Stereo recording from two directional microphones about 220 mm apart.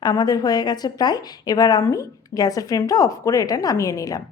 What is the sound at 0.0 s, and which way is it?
A woman's voice, 15° left (ahead or behind).